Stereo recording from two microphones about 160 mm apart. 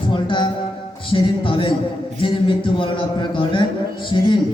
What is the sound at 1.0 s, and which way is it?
Speech, 35° left (ahead or behind).